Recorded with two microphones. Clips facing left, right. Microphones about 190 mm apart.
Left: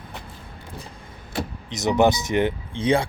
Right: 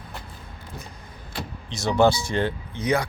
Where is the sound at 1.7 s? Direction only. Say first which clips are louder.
Left 1 dB; 20° left (ahead or behind).